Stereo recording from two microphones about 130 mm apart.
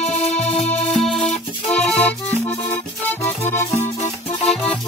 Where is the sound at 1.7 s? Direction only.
10° left (ahead or behind).